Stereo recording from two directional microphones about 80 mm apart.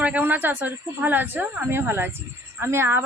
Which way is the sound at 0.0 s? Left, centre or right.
Centre.